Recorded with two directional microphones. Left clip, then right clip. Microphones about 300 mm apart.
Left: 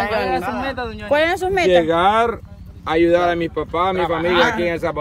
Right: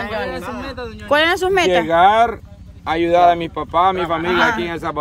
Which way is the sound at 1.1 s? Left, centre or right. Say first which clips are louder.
Right 2 dB; centre.